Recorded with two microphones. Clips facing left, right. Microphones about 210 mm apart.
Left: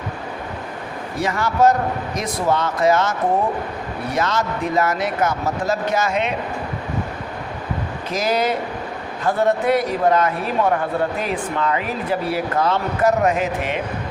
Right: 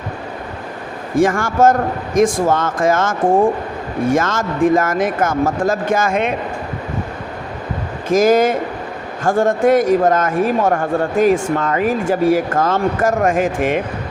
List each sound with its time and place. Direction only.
1.1 s a man's voice: 50° right (ahead or behind)
8.1 s a man's voice: 50° right (ahead or behind)